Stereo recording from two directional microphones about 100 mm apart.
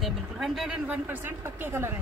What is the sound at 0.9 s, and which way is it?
Speech, 20° right (ahead or behind).